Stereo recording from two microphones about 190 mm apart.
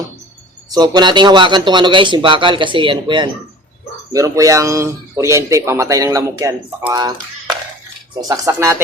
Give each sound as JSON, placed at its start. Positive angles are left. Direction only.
{"t": 0.7, "sound": "a man's voice", "side_deg": -20}